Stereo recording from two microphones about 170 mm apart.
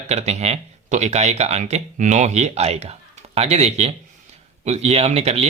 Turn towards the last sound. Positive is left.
turn(degrees=-35)  # may be behind; listen again after turning